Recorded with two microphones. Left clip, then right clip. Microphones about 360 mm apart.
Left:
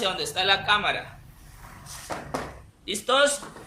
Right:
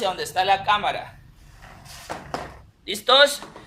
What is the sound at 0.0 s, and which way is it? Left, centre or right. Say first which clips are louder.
Speech: right 3 dB; centre.